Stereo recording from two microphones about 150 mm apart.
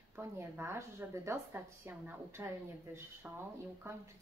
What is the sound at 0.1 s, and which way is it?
A woman's voice, 20° right (ahead or behind).